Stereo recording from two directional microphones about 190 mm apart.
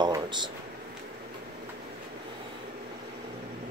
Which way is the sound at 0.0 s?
20° right (ahead or behind).